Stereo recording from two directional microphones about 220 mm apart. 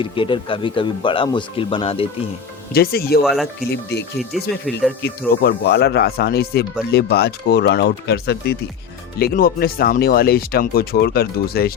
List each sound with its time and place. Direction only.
0.0 s speech: 25° left (ahead or behind)
2.7 s speech: 45° left (ahead or behind)
3.2 s speech: centre (ahead or behind)
5.4 s speech: 50° left (ahead or behind)